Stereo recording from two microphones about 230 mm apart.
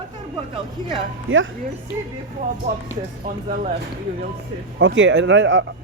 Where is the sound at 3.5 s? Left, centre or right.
Right.